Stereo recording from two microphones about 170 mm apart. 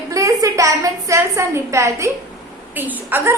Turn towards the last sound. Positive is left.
turn(degrees=-10)  # may be behind; listen again after turning